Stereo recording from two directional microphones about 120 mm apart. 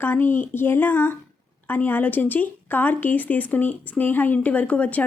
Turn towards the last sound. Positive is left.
turn(degrees=10)  # may be behind; listen again after turning